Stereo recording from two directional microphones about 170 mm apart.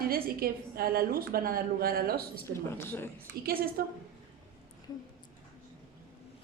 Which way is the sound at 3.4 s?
60° right (ahead or behind).